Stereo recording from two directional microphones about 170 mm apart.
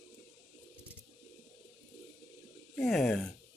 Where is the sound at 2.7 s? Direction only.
5° left (ahead or behind).